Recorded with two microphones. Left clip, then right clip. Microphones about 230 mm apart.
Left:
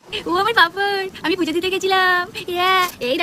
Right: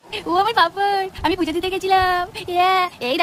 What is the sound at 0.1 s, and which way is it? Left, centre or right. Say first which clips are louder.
Speech: even; centre.